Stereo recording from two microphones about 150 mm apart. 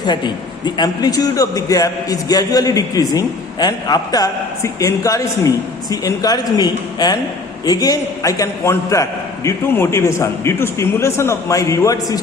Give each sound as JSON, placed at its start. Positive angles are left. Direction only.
{"t": 0.0, "sound": "a man's voice", "side_deg": 30}